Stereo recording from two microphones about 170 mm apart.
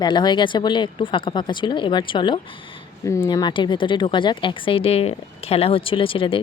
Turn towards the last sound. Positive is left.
turn(degrees=30)  # may be behind; listen again after turning